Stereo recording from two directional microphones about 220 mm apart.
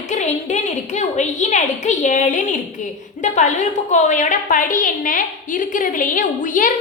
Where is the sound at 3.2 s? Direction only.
35° left (ahead or behind).